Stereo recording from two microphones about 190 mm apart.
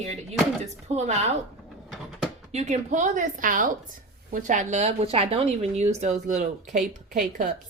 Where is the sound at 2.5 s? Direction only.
35° right (ahead or behind).